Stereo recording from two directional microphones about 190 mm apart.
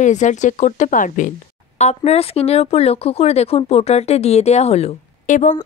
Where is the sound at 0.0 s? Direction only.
40° left (ahead or behind).